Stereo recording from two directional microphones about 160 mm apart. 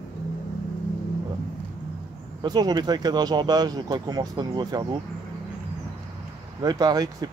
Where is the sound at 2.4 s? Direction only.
25° right (ahead or behind).